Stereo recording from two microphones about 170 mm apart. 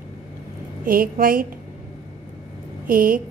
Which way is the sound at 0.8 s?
55° right (ahead or behind).